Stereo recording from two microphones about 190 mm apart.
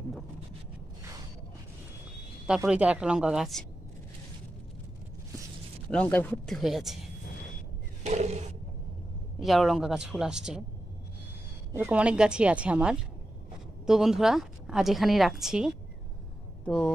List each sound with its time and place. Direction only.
2.4 s a woman's voice: 5° right (ahead or behind)
5.9 s a woman's voice: 5° left (ahead or behind)
8.0 s a sound: 35° right (ahead or behind)
9.4 s a woman's voice: centre (ahead or behind)
11.7 s a woman's voice: 10° right (ahead or behind)